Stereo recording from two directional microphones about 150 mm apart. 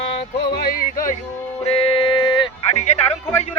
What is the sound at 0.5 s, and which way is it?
Music, 85° left.